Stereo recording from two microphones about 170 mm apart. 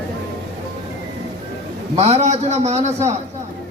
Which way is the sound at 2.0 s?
40° right (ahead or behind).